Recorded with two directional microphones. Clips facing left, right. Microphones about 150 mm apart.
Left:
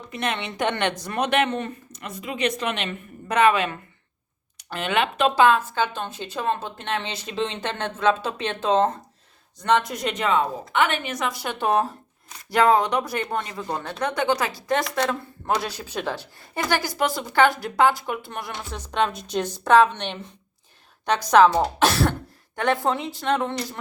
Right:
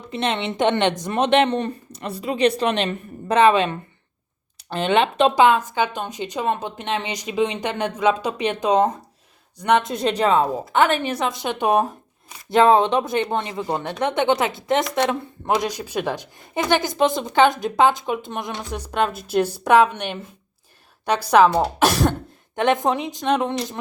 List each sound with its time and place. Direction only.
0.1 s a woman's voice: 25° right (ahead or behind)
5.3 s speech: 15° right (ahead or behind)
9.9 s a woman's voice: 30° right (ahead or behind)